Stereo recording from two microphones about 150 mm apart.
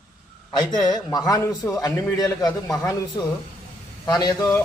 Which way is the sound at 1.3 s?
20° left (ahead or behind).